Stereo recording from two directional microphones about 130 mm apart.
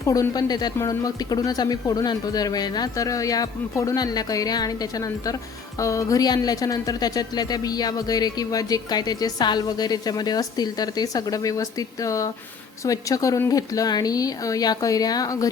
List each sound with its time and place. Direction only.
0.0 s a woman's voice: 25° left (ahead or behind)